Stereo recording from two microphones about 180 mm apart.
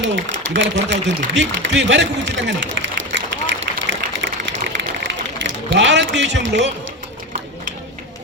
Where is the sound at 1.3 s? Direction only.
85° right.